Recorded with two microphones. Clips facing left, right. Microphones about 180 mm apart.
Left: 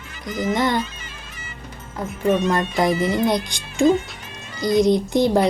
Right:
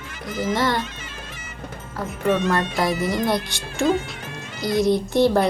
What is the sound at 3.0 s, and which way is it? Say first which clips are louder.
Speech: left 2 dB; 20° left (ahead or behind).